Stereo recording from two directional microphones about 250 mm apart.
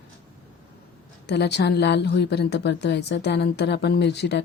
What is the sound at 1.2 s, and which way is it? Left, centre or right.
A woman's voice, left.